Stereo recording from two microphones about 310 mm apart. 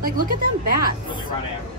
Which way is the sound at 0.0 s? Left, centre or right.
Right.